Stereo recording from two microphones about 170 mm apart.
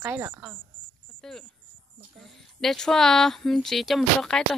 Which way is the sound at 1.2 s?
5° left (ahead or behind).